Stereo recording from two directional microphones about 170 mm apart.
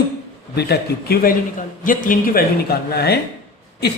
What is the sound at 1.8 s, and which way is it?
A man's voice, 55° left (ahead or behind).